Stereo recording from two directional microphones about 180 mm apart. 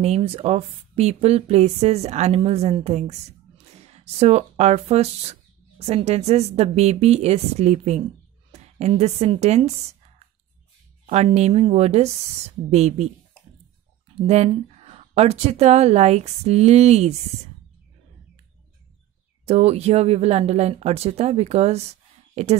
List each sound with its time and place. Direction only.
0.0 s a woman's voice: 35° right (ahead or behind)
11.1 s speech: 35° right (ahead or behind)
14.2 s speech: 35° right (ahead or behind)
19.4 s speech: 35° right (ahead or behind)